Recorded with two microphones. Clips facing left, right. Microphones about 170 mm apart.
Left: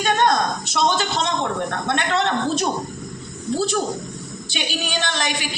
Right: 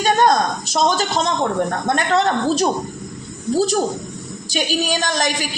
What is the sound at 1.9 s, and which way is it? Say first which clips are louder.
Speech: right 3 dB; 40° right (ahead or behind).